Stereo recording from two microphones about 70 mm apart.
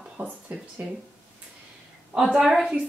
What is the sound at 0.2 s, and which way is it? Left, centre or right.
Speech, right.